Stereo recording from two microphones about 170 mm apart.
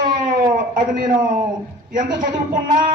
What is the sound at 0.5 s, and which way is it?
Speech, 50° right (ahead or behind).